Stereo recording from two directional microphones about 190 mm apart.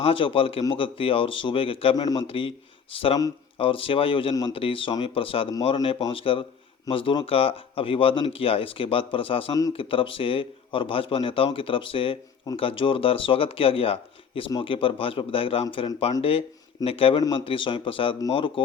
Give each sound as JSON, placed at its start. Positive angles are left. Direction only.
{"t": 0.0, "sound": "speech", "side_deg": 30}